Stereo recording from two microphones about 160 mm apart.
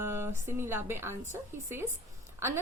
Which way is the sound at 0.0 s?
15° right (ahead or behind).